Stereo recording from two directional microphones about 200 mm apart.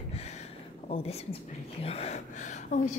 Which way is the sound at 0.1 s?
35° left (ahead or behind).